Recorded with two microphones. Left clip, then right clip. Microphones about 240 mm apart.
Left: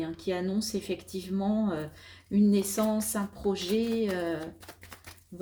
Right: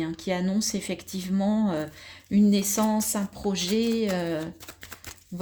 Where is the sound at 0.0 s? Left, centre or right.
Right.